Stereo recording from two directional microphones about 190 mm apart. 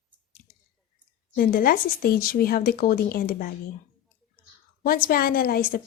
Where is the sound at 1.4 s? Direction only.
50° left (ahead or behind).